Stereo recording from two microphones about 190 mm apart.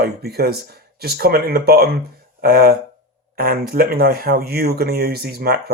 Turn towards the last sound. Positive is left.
turn(degrees=-55)  # may be behind; listen again after turning